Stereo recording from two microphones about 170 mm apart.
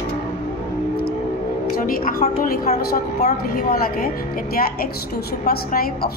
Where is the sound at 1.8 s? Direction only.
55° left (ahead or behind).